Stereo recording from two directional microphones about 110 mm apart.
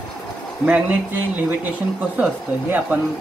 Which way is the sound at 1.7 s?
15° right (ahead or behind).